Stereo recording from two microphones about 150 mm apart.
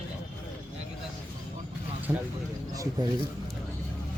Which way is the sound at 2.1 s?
15° right (ahead or behind).